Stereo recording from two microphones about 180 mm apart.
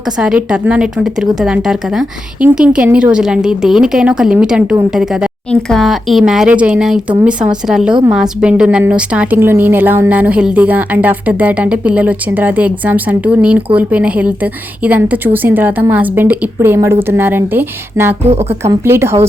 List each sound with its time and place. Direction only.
0.2 s a woman's voice: 5° right (ahead or behind)